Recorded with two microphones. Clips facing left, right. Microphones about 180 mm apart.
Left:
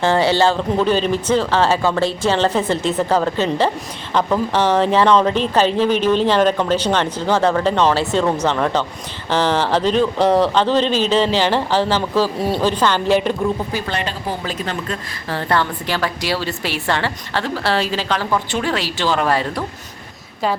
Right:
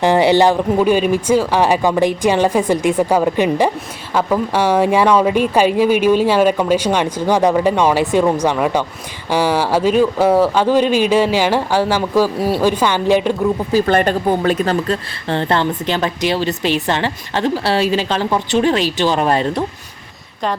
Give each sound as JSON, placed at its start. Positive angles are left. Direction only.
{"t": 0.0, "sound": "speech", "side_deg": -15}
{"t": 13.8, "sound": "speech", "side_deg": -50}
{"t": 15.3, "sound": "a woman's voice", "side_deg": -25}